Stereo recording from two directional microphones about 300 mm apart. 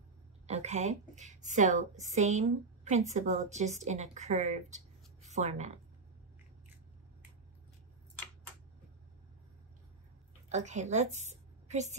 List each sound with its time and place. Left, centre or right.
0.5 s a woman's voice: right
10.5 s a woman's voice: right